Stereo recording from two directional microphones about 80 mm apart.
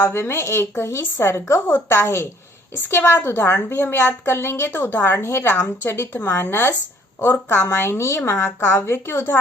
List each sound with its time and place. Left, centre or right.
0.1 s a woman's voice: left